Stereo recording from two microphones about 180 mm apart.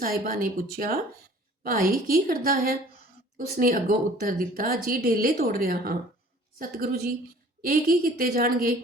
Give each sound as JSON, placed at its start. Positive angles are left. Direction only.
{"t": 0.0, "sound": "speech", "side_deg": -50}